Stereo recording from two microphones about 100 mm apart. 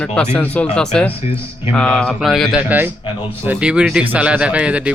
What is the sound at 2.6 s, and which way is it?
Speech, 20° right (ahead or behind).